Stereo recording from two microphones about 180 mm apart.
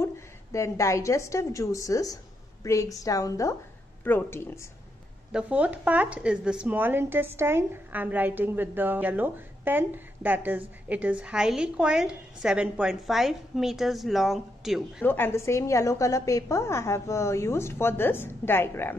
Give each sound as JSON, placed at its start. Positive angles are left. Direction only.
{"t": 0.0, "sound": "a woman's voice", "side_deg": 15}
{"t": 5.3, "sound": "a woman's voice", "side_deg": -5}
{"t": 15.0, "sound": "a woman's voice", "side_deg": 10}